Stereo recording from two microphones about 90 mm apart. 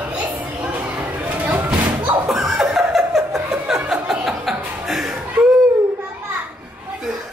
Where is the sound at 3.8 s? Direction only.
10° right (ahead or behind).